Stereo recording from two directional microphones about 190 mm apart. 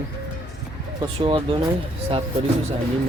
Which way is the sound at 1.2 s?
30° right (ahead or behind).